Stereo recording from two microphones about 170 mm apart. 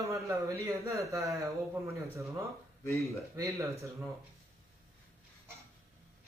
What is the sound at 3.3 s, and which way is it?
Speech, 15° right (ahead or behind).